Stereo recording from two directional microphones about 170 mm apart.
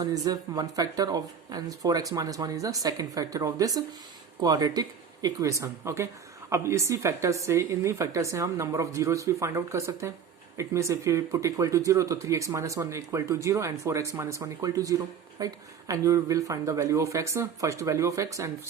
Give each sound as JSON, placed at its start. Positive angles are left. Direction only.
{"t": 0.0, "sound": "speech", "side_deg": -20}